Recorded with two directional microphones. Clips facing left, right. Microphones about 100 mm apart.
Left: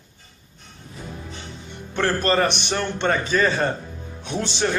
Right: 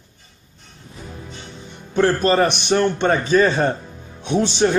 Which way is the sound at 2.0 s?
15° right (ahead or behind).